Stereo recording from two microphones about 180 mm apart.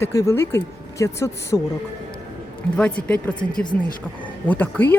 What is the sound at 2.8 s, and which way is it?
Speech, 5° left (ahead or behind).